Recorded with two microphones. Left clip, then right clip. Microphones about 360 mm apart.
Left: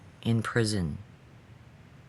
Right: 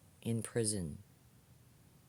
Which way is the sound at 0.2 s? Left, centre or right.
Right.